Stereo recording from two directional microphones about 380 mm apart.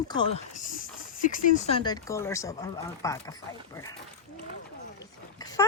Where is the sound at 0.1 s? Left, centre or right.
Centre.